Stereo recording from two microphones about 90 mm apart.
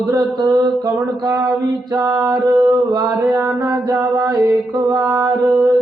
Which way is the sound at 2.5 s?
45° right (ahead or behind).